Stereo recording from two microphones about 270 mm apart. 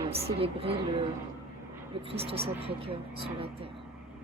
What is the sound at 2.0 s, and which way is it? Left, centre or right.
Speech, right.